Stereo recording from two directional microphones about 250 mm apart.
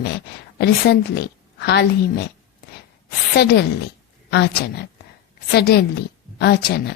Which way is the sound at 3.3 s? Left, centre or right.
Left.